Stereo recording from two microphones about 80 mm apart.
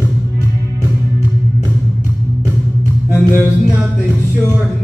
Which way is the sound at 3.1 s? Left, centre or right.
Left.